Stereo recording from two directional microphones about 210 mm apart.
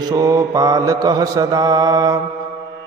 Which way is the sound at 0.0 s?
15° right (ahead or behind).